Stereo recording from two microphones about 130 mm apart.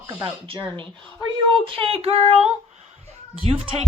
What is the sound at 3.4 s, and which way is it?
Speech, 45° right (ahead or behind).